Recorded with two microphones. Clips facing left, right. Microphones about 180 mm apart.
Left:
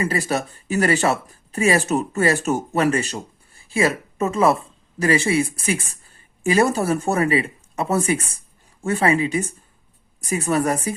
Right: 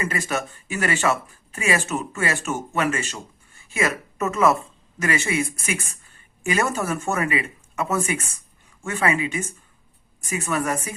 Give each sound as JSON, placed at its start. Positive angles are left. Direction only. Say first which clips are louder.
{"t": 0.0, "sound": "a woman's voice", "louder": "left 4 dB", "side_deg": 35}